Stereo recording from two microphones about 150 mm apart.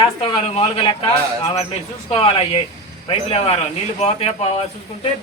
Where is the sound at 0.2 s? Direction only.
40° left (ahead or behind).